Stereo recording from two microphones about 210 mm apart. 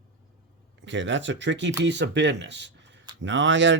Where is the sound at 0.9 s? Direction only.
60° right (ahead or behind).